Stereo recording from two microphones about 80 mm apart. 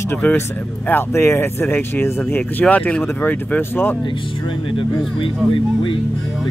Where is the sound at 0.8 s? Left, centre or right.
Left.